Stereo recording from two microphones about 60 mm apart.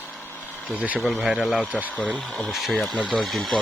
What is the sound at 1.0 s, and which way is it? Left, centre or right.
Speech, centre.